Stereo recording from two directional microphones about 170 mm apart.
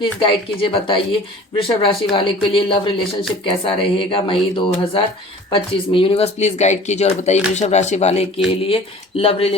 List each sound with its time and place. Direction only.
0.0 s speech: 30° left (ahead or behind)